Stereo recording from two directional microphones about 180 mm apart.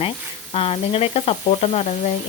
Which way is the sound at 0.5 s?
30° left (ahead or behind).